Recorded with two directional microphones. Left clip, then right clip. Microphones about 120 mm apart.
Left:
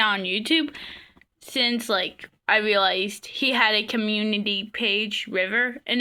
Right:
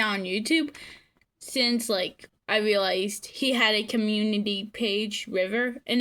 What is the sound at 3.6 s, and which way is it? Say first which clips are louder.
Speech: left 2 dB; 40° left (ahead or behind).